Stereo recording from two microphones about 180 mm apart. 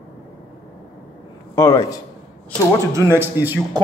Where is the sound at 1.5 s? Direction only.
15° left (ahead or behind).